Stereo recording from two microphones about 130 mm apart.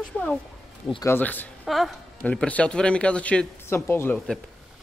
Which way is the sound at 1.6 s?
Centre (ahead or behind).